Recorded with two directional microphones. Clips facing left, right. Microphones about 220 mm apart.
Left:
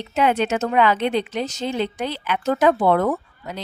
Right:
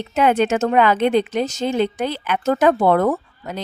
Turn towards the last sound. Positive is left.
turn(degrees=-45)  # may be behind; listen again after turning